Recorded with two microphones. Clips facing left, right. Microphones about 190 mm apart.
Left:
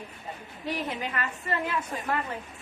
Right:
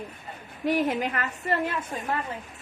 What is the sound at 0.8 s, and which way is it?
Speech, 50° right (ahead or behind).